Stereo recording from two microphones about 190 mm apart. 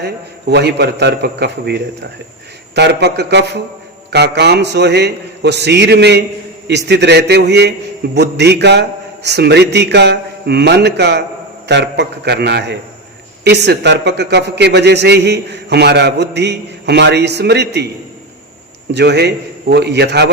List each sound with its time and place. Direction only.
0.5 s a man's voice: 60° right (ahead or behind)
18.9 s a man's voice: 60° right (ahead or behind)